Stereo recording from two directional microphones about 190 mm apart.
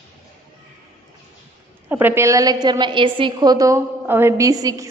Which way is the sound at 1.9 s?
10° right (ahead or behind).